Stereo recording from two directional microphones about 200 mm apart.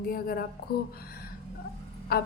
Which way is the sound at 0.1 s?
50° left (ahead or behind).